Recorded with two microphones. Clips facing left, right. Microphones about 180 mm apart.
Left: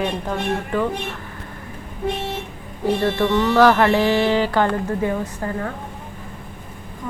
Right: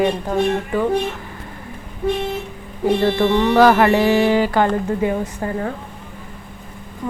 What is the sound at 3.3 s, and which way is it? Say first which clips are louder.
Speech: right 1 dB; 15° right (ahead or behind).